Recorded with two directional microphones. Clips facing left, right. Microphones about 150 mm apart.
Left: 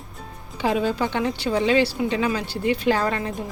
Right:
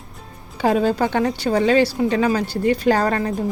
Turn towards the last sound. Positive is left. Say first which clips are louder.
# right 4 dB
turn(degrees=-40)  # may be behind; listen again after turning